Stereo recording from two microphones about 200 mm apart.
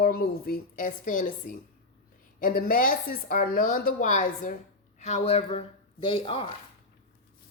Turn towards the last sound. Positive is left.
turn(degrees=25)  # may be behind; listen again after turning